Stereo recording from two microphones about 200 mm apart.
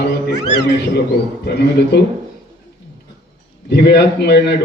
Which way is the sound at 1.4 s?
55° left (ahead or behind).